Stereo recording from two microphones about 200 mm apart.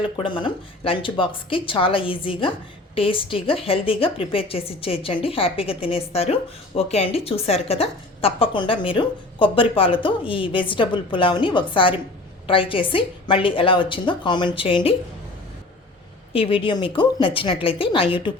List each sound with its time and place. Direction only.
0.0 s a woman's voice: 25° left (ahead or behind)
16.3 s a woman's voice: 25° left (ahead or behind)